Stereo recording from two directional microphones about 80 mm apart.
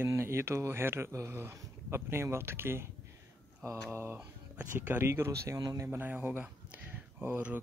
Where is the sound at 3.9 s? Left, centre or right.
Right.